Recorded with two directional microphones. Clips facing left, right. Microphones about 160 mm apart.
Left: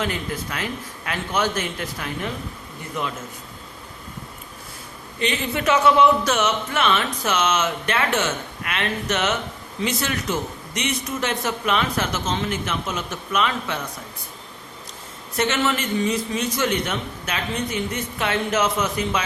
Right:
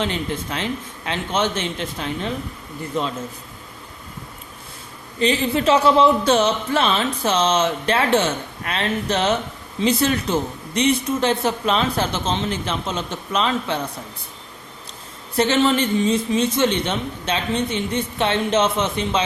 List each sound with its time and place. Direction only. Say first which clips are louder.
0.0 s a man's voice: right 2 dB; 25° right (ahead or behind)
5.2 s a man's voice: right 5 dB; 30° right (ahead or behind)
15.4 s a man's voice: right 5 dB; 30° right (ahead or behind)